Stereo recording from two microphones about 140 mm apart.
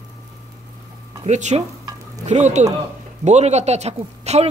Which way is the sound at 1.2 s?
55° right (ahead or behind).